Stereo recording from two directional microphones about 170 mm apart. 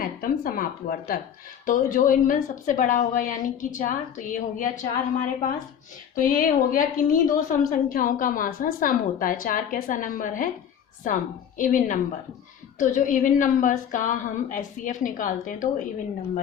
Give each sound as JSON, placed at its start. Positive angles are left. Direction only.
{"t": 0.0, "sound": "a woman's voice", "side_deg": 55}